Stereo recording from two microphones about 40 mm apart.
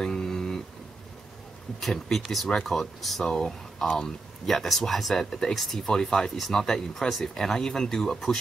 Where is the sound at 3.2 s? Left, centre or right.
Centre.